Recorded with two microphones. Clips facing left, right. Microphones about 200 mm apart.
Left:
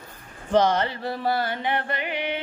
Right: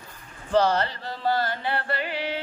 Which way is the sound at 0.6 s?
15° left (ahead or behind).